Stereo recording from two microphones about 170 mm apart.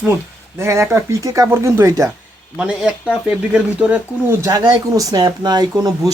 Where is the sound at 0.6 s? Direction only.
15° right (ahead or behind).